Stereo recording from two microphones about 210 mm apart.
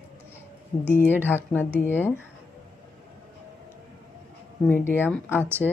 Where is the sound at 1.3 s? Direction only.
10° left (ahead or behind).